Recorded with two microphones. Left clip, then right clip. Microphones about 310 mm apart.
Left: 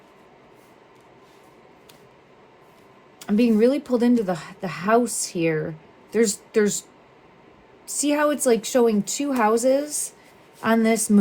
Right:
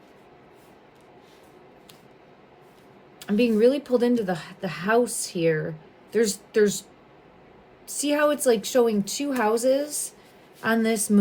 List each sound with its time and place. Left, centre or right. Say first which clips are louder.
3.2 s speech: left 1 dB; centre
7.9 s speech: left 1 dB; centre